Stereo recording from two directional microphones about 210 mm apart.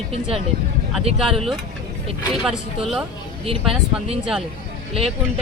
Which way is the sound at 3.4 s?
25° right (ahead or behind).